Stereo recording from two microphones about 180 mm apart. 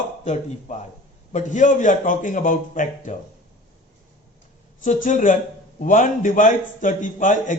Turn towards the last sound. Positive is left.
turn(degrees=45)  # may be behind; listen again after turning